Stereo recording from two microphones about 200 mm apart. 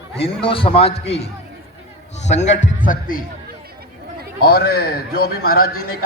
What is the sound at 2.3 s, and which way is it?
Speech, 35° left (ahead or behind).